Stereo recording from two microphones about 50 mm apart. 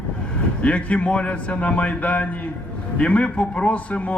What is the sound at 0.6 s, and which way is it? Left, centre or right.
A man's voice, left.